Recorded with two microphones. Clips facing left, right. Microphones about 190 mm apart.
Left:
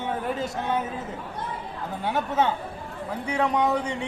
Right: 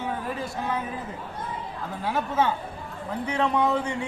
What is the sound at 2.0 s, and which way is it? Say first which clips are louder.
A man's voice: left 1 dB; 20° left (ahead or behind).